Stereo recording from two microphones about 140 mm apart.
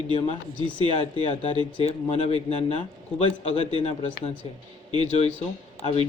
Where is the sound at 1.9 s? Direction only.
50° left (ahead or behind).